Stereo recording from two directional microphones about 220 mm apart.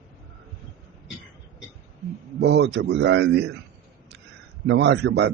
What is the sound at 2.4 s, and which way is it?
A man's voice, 50° right (ahead or behind).